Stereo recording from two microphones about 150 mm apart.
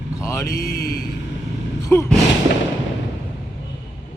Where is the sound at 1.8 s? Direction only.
20° left (ahead or behind).